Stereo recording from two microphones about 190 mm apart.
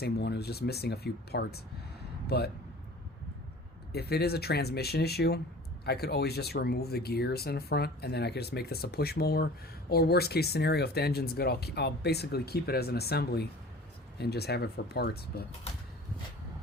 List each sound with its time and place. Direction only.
0.0 s speech: 60° left (ahead or behind)
3.9 s speech: 55° left (ahead or behind)